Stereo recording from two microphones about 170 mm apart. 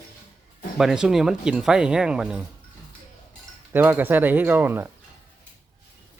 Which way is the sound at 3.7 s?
10° right (ahead or behind).